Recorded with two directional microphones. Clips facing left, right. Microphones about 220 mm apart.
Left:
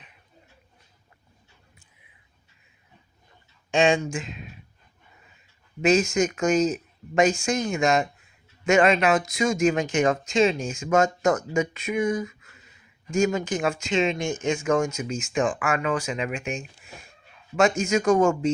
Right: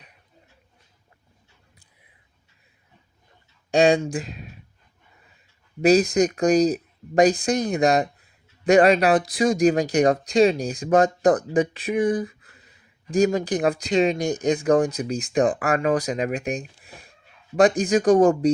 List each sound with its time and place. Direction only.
3.7 s speech: 35° right (ahead or behind)
5.8 s speech: 35° right (ahead or behind)